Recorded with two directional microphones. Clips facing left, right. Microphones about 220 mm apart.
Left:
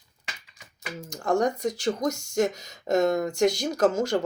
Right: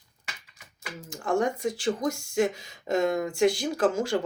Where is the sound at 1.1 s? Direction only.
40° left (ahead or behind).